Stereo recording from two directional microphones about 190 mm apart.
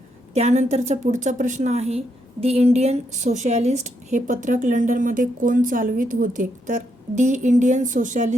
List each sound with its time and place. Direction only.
0.3 s a woman's voice: 40° right (ahead or behind)